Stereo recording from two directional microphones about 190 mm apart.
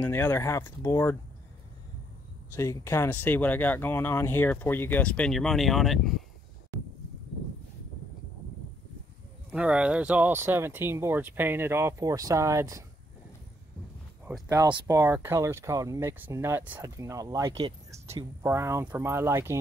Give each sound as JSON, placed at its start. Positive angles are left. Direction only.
{"t": 0.0, "sound": "speech", "side_deg": 10}
{"t": 2.5, "sound": "speech", "side_deg": 15}
{"t": 9.5, "sound": "speech", "side_deg": -5}
{"t": 14.5, "sound": "speech", "side_deg": -15}